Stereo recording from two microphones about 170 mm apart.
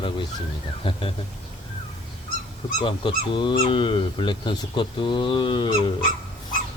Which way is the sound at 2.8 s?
30° left (ahead or behind).